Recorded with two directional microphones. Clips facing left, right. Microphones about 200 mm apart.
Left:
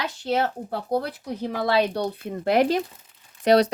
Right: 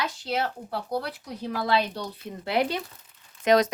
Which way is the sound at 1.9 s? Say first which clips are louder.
Left 8 dB; 55° left (ahead or behind).